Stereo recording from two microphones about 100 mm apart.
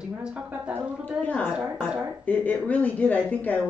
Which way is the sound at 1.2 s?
15° left (ahead or behind).